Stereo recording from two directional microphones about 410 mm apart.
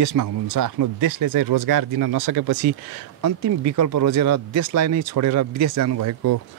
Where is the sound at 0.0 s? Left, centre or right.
Right.